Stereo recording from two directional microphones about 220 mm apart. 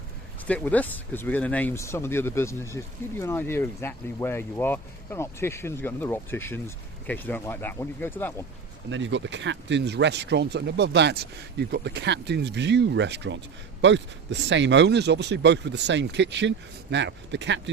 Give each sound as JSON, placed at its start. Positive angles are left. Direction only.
{"t": 0.4, "sound": "speech", "side_deg": 5}
{"t": 8.9, "sound": "speech", "side_deg": -55}